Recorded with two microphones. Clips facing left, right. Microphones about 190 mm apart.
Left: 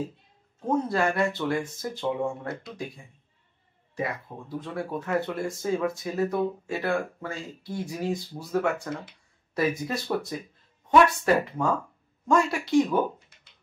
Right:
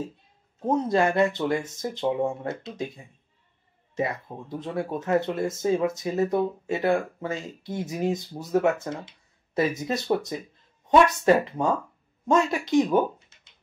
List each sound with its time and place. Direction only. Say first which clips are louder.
0.7 s speech: right 3 dB; 20° right (ahead or behind)
3.9 s speech: right 3 dB; 20° right (ahead or behind)